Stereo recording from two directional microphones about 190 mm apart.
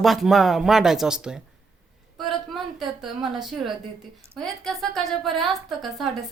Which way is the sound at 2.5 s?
Centre (ahead or behind).